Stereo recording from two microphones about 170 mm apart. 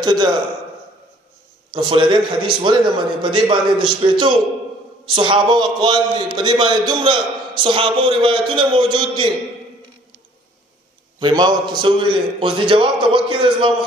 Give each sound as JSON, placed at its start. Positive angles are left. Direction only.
{"t": 0.0, "sound": "a man's voice", "side_deg": -25}
{"t": 1.7, "sound": "a man's voice", "side_deg": -30}
{"t": 11.1, "sound": "a man's voice", "side_deg": -25}